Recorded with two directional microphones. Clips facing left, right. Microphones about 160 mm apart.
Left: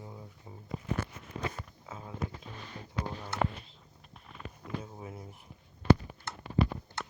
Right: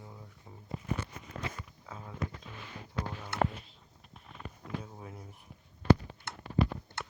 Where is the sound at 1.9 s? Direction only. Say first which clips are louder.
Left 1 dB; 10° left (ahead or behind).